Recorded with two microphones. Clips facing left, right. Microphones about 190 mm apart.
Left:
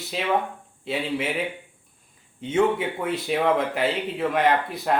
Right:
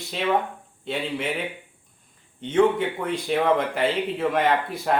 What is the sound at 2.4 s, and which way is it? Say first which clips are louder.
Speech: right 2 dB; 5° left (ahead or behind).